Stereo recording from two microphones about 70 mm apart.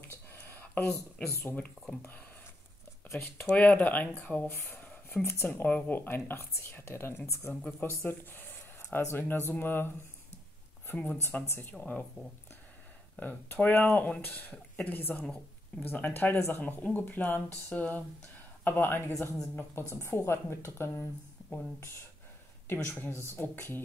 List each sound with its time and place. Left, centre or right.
0.1 s a sound: left
1.1 s speech: centre; by 5.5 s left
5.5 s speech: left
11.1 s speech: left
11.7 s speech: centre; by 21.1 s left
22.7 s speech: left